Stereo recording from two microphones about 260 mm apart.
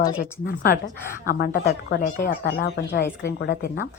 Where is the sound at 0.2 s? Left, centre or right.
Left.